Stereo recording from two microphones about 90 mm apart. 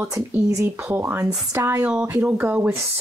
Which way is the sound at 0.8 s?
25° right (ahead or behind).